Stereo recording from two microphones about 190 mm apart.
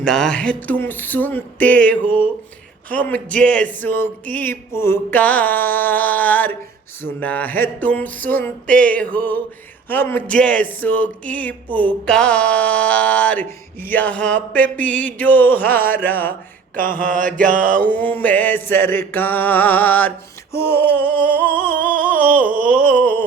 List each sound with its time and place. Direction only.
0.0 s speech: 5° left (ahead or behind)
16.7 s mantra: 45° right (ahead or behind)
17.7 s speech: 10° left (ahead or behind)